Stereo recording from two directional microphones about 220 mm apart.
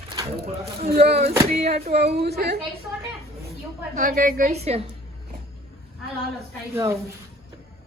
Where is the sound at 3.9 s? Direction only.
35° right (ahead or behind).